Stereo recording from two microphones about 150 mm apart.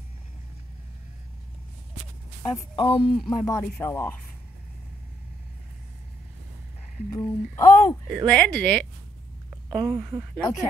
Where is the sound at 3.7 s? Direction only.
15° left (ahead or behind).